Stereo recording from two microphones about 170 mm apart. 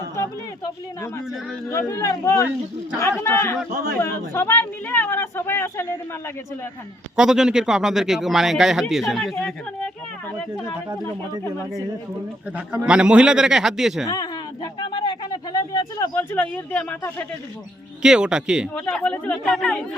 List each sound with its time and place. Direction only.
1.7 s speech: 15° left (ahead or behind)
3.7 s a man's voice: 55° right (ahead or behind)
4.0 s speech: 15° left (ahead or behind)
7.2 s a man's voice: 5° right (ahead or behind)
12.5 s a man's voice: 5° right (ahead or behind)
14.1 s a sound: 25° left (ahead or behind)
16.1 s speech: 10° left (ahead or behind)
18.0 s a man's voice: 5° right (ahead or behind)